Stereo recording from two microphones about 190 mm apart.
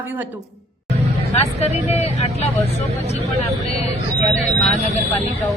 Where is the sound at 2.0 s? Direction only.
35° left (ahead or behind).